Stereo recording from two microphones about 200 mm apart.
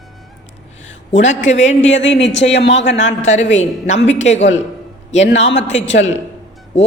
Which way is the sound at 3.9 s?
35° left (ahead or behind).